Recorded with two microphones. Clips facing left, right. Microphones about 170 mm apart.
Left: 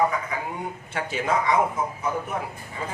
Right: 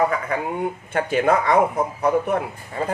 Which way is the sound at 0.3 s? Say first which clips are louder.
Right 7 dB; 65° right (ahead or behind).